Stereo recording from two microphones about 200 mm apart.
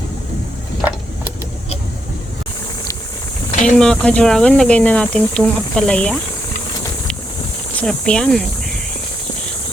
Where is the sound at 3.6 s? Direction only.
5° left (ahead or behind).